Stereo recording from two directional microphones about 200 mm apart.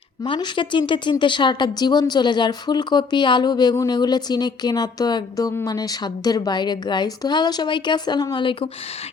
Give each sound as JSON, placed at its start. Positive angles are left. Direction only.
{"t": 0.3, "sound": "speech", "side_deg": 25}